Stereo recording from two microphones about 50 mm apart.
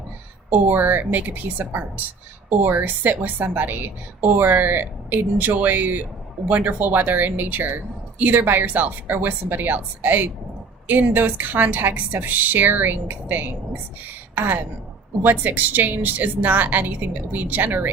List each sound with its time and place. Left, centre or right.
0.5 s a woman's voice: right